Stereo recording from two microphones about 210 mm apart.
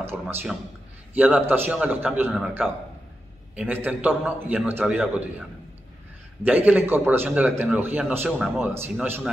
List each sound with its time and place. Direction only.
0.0 s a man's voice: 10° right (ahead or behind)
6.4 s a man's voice: 10° right (ahead or behind)